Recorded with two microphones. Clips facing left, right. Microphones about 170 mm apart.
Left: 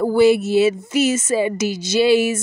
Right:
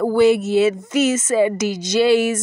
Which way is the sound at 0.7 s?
30° left (ahead or behind).